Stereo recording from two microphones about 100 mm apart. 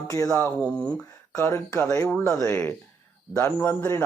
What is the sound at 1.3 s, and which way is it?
Speech, 25° left (ahead or behind).